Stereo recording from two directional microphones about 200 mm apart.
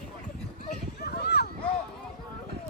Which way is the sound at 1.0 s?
50° left (ahead or behind).